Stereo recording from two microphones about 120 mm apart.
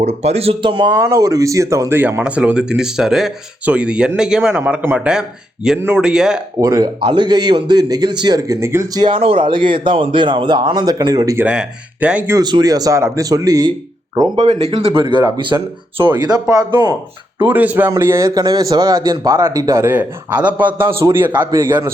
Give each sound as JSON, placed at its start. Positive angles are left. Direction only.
{"t": 0.0, "sound": "speech", "side_deg": -60}
{"t": 0.9, "sound": "speech", "side_deg": -25}
{"t": 6.6, "sound": "a man's voice", "side_deg": -30}
{"t": 9.0, "sound": "speech", "side_deg": -45}
{"t": 11.3, "sound": "speech", "side_deg": -10}
{"t": 12.4, "sound": "a man's voice", "side_deg": -35}
{"t": 14.6, "sound": "a man's voice", "side_deg": -60}
{"t": 17.4, "sound": "a man's voice", "side_deg": -15}